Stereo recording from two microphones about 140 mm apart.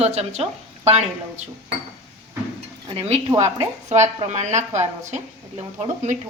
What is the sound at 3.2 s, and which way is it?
Speech, 30° right (ahead or behind).